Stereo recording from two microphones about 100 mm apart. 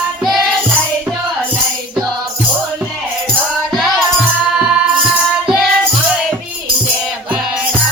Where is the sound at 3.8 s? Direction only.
5° right (ahead or behind).